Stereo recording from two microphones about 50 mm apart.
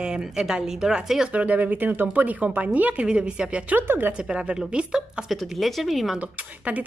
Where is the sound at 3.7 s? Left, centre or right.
Right.